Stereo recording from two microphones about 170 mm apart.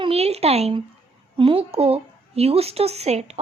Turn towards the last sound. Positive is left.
turn(degrees=-40)  # may be behind; listen again after turning